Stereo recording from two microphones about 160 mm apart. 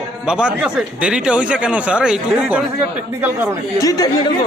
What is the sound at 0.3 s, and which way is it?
Speech, 5° right (ahead or behind).